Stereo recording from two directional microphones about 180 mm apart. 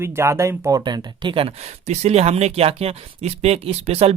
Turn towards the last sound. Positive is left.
turn(degrees=-35)  # may be behind; listen again after turning